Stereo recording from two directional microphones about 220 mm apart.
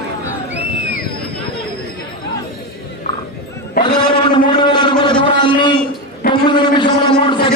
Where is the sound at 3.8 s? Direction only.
20° left (ahead or behind).